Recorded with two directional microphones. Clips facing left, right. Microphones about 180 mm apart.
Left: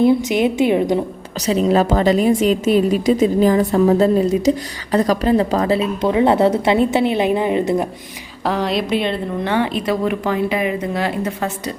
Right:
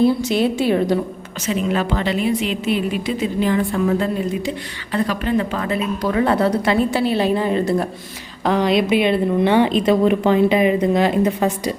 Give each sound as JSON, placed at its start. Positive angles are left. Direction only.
{"t": 0.0, "sound": "a woman's voice", "side_deg": 20}
{"t": 1.4, "sound": "a woman's voice", "side_deg": 35}
{"t": 8.4, "sound": "a woman's voice", "side_deg": 0}